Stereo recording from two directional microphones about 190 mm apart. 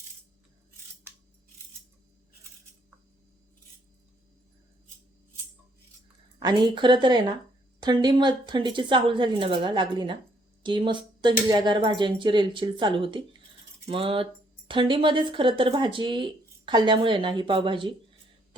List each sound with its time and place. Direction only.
6.4 s speech: 25° right (ahead or behind)